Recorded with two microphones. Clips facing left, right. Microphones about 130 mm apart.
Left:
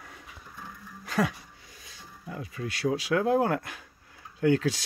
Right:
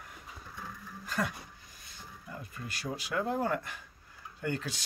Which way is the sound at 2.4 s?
90° left.